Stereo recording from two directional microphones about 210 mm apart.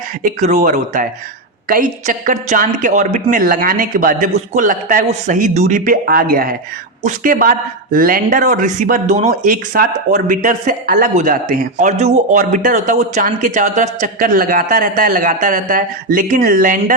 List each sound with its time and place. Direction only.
0.2 s speech: 35° right (ahead or behind)